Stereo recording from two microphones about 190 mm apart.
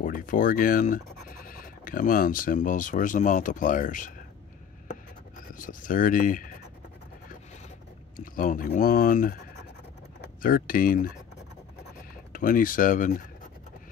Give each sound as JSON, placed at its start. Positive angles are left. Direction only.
{"t": 0.0, "sound": "speech", "side_deg": 45}
{"t": 5.5, "sound": "speech", "side_deg": 45}
{"t": 8.2, "sound": "speech", "side_deg": 45}
{"t": 10.4, "sound": "speech", "side_deg": 50}
{"t": 12.3, "sound": "speech", "side_deg": 45}